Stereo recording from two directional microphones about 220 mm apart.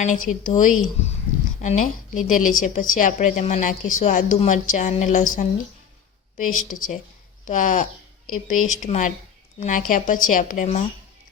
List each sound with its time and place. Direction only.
0.0 s a woman's voice: 35° left (ahead or behind)